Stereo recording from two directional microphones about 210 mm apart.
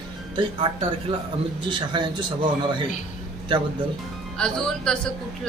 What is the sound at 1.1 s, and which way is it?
Speech, 25° right (ahead or behind).